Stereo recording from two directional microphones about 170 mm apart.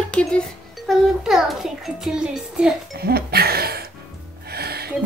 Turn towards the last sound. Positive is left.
turn(degrees=-65)  # may be behind; listen again after turning